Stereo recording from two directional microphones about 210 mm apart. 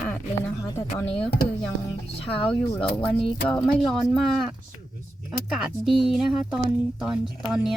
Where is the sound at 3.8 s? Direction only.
Centre (ahead or behind).